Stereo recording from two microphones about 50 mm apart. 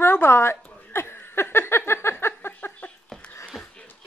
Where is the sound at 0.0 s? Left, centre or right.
Left.